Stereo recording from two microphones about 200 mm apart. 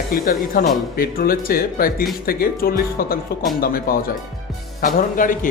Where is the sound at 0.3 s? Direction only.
45° left (ahead or behind).